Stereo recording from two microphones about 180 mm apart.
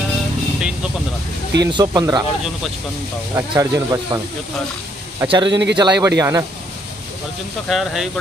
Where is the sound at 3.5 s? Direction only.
20° right (ahead or behind).